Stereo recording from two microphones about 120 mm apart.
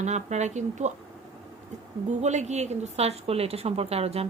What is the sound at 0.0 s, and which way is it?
Speech, 75° right (ahead or behind).